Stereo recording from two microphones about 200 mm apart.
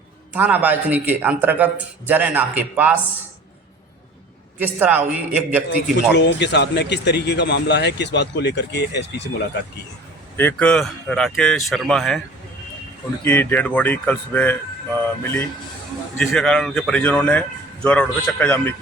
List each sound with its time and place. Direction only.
0.3 s a man's voice: 10° right (ahead or behind)
4.5 s a man's voice: 10° right (ahead or behind)
5.7 s speech: 60° left (ahead or behind)
10.3 s speech: 10° left (ahead or behind)
13.2 s speech: 10° left (ahead or behind)